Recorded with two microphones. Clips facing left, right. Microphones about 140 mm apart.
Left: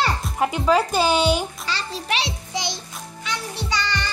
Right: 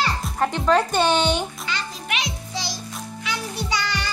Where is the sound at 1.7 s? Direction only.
35° left (ahead or behind).